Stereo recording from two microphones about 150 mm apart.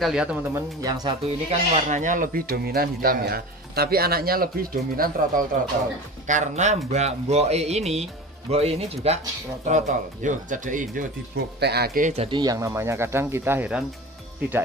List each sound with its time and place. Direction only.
0.0 s speech: 5° right (ahead or behind)
0.6 s speech: 25° right (ahead or behind)
1.2 s speech: 50° right (ahead or behind); by 5.4 s 75° right (ahead or behind)
6.2 s speech: 55° right (ahead or behind); by 12.1 s 80° right
12.1 s speech: 40° right (ahead or behind)
12.4 s speech: 25° right (ahead or behind)